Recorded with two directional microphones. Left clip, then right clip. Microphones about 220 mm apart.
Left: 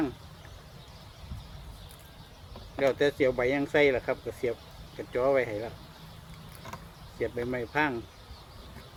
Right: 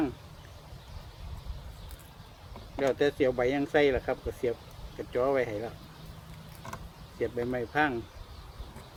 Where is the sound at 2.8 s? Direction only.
5° left (ahead or behind).